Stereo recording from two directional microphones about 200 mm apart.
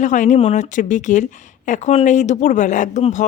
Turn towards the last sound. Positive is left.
turn(degrees=35)  # may be behind; listen again after turning